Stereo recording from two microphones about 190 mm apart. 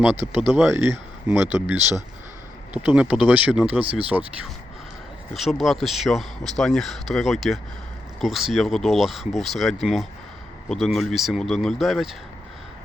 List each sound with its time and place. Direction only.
0.7 s speech: 15° right (ahead or behind)
3.8 s speech: 30° right (ahead or behind)
5.3 s speech: centre (ahead or behind)